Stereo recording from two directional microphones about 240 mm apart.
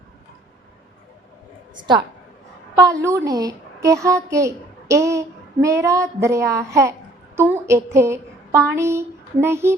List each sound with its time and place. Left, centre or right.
1.7 s a woman's voice: centre